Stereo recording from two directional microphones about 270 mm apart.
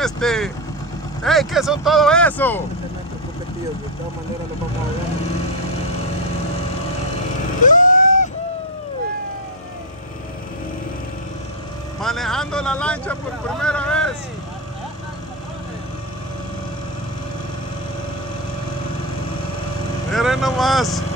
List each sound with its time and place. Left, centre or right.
0.0 s speech: centre
7.6 s vehicle: left
12.0 s speech: centre
20.1 s speech: centre